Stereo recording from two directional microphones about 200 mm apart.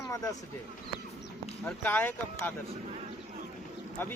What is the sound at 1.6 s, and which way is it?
Speech, 5° left (ahead or behind).